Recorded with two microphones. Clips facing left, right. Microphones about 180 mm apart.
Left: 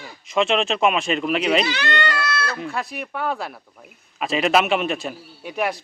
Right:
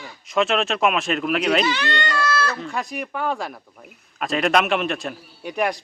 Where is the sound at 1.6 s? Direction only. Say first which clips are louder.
Even; 65° left (ahead or behind).